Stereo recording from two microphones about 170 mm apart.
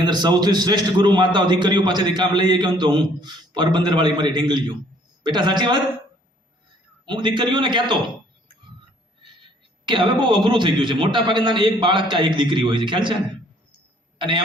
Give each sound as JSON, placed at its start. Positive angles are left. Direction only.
{"t": 0.0, "sound": "a man's voice", "side_deg": -25}
{"t": 7.0, "sound": "a man's voice", "side_deg": -30}
{"t": 9.8, "sound": "a man's voice", "side_deg": -30}
{"t": 14.2, "sound": "speech", "side_deg": -30}